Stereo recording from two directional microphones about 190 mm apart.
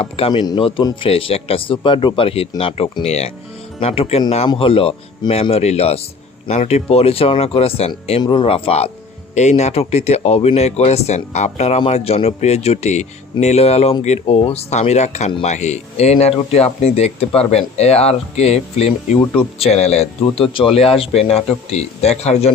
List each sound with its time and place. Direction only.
0.0 s speech: 25° left (ahead or behind)